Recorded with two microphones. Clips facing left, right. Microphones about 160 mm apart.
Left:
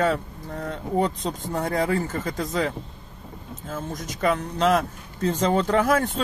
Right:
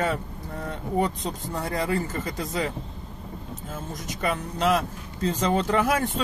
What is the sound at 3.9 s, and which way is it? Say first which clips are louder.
Speech: left 4 dB; 40° left (ahead or behind).